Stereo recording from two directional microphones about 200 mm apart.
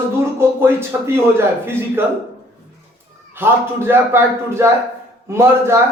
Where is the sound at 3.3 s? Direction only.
10° right (ahead or behind).